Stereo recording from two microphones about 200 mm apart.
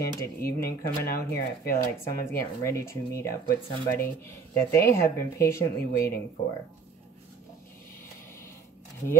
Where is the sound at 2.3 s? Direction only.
15° left (ahead or behind).